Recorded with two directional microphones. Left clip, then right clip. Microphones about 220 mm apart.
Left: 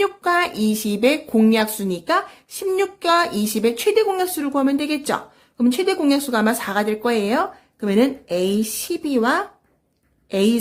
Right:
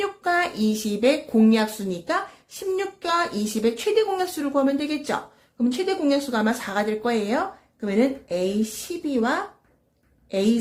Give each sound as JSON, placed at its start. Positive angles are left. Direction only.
{"t": 0.0, "sound": "speech", "side_deg": 35}